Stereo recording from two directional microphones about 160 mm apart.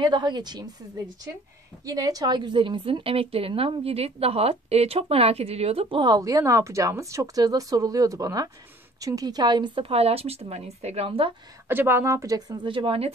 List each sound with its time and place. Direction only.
0.0 s a woman's voice: 30° right (ahead or behind)
11.6 s a woman's voice: 15° right (ahead or behind); by 13.1 s 35° right (ahead or behind)